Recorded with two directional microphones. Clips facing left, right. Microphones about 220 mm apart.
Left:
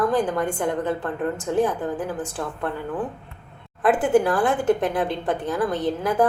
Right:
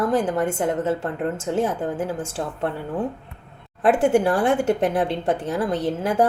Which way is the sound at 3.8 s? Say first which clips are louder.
Right 1 dB; 25° right (ahead or behind).